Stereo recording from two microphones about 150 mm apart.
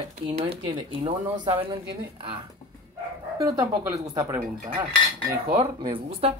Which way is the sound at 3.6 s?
20° right (ahead or behind).